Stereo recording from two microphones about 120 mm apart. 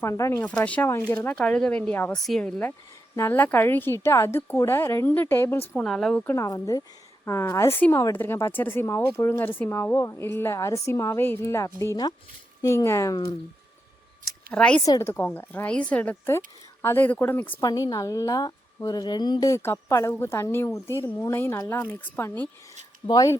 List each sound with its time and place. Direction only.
0.0 s a woman's voice: 25° left (ahead or behind)
0.4 s a woman's voice: 10° left (ahead or behind)
2.1 s a woman's voice: 5° left (ahead or behind)
5.8 s speech: 5° left (ahead or behind)
6.2 s a woman's voice: 25° left (ahead or behind)
14.5 s a woman's voice: 10° left (ahead or behind)
14.8 s a woman's voice: 25° left (ahead or behind)
17.6 s a woman's voice: 30° left (ahead or behind); by 22.4 s 15° left (ahead or behind)
23.0 s a woman's voice: 30° left (ahead or behind)